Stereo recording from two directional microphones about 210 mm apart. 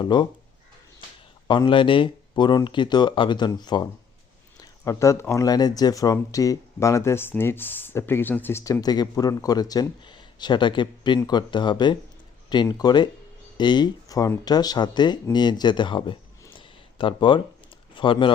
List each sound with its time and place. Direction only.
0.0 s speech: 20° left (ahead or behind)
1.5 s speech: 20° left (ahead or behind)